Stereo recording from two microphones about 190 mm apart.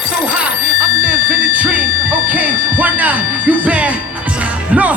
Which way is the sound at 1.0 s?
5° right (ahead or behind).